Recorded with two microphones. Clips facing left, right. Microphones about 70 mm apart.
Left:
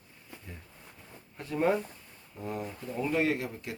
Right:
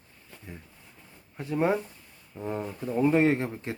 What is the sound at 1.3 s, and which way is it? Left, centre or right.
Speech, centre.